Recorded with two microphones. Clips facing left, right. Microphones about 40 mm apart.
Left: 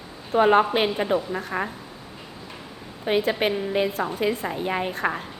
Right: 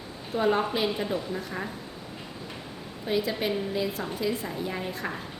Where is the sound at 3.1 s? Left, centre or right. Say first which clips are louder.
Left 5 dB; left.